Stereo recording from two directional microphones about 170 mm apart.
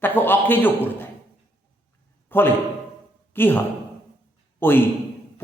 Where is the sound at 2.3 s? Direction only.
15° left (ahead or behind).